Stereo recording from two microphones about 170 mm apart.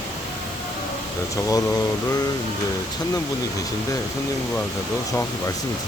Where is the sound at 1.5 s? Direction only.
20° left (ahead or behind).